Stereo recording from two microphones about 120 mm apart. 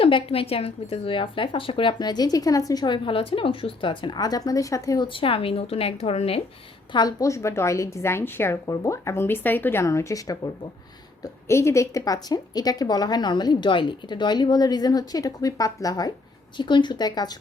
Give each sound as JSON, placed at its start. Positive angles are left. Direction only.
{"t": 0.0, "sound": "speech", "side_deg": 50}
{"t": 5.0, "sound": "a woman's voice", "side_deg": 50}
{"t": 6.9, "sound": "a woman's voice", "side_deg": 30}